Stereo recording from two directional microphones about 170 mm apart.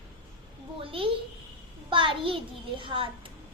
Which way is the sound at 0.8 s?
30° right (ahead or behind).